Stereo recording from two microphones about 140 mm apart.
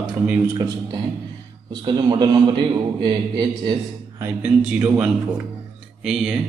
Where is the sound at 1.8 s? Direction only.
30° right (ahead or behind).